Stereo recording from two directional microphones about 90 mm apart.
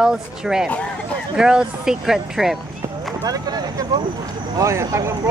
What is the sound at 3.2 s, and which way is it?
Speech, 45° right (ahead or behind).